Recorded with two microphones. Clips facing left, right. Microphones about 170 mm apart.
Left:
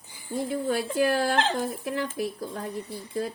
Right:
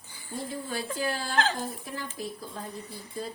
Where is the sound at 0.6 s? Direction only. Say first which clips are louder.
Left 8 dB; 60° left (ahead or behind).